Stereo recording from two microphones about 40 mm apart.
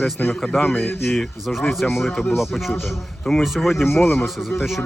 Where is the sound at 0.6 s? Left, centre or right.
Left.